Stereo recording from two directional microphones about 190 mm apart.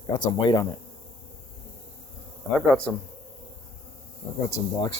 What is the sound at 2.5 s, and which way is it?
Speech, 5° left (ahead or behind).